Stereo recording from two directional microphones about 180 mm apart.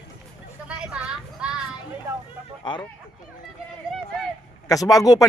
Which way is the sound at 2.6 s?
25° left (ahead or behind).